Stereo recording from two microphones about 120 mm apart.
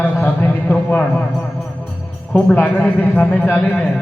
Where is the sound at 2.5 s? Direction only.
10° left (ahead or behind).